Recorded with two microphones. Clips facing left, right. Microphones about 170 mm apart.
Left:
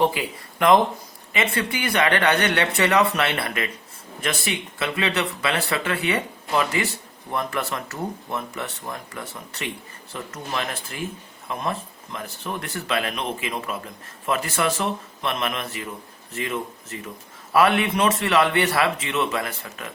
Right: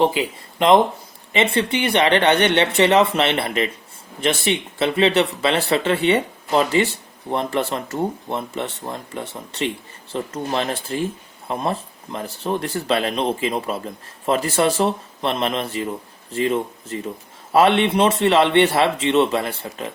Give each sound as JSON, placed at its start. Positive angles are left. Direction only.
{"t": 0.0, "sound": "speech", "side_deg": -25}